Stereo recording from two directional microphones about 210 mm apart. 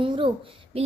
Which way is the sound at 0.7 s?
30° right (ahead or behind).